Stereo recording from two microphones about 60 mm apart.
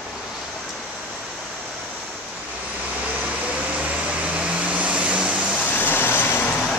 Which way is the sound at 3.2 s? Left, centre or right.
Right.